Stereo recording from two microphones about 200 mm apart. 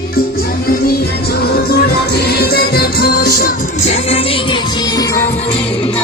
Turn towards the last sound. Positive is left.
turn(degrees=30)  # may be behind; listen again after turning